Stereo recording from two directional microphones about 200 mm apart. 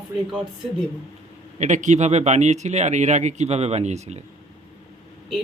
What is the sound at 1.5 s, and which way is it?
Speech, 35° right (ahead or behind).